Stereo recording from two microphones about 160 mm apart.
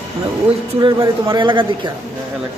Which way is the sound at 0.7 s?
30° right (ahead or behind).